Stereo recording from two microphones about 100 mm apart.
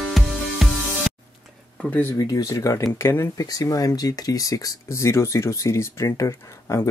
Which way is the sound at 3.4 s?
35° left (ahead or behind).